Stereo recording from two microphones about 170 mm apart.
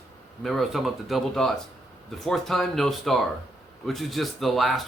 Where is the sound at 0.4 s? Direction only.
Centre (ahead or behind).